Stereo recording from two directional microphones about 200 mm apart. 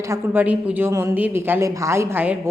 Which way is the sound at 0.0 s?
10° right (ahead or behind).